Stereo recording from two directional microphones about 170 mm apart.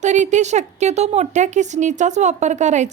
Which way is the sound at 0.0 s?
45° right (ahead or behind).